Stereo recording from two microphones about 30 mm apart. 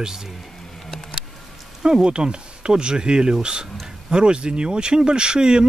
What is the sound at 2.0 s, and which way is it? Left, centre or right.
Speech, right.